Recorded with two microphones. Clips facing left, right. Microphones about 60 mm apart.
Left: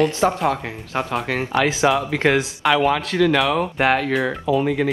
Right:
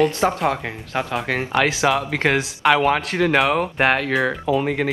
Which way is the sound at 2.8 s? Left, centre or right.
Right.